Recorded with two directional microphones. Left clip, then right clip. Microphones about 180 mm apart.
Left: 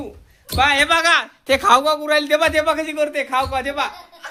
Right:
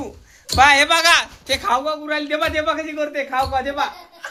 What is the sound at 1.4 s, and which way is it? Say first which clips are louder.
A man's voice: left 5 dB; 60° left (ahead or behind).